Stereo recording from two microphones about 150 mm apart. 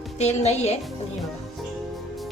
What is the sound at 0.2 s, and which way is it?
Speech, 45° left (ahead or behind).